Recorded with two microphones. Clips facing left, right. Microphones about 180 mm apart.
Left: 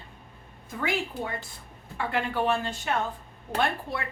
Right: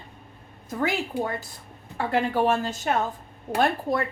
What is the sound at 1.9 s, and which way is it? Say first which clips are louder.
A woman's voice: right 5 dB; 40° right (ahead or behind).